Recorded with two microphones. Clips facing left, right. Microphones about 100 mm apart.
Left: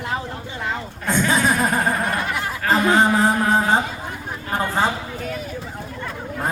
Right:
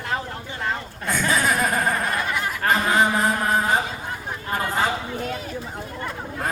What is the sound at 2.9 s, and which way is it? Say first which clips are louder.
Music: left 5 dB; 30° left (ahead or behind).